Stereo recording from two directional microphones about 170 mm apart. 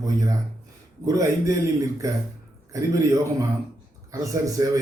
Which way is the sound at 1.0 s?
20° right (ahead or behind).